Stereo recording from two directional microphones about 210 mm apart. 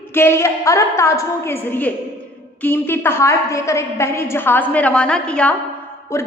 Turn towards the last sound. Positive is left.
turn(degrees=15)  # may be behind; listen again after turning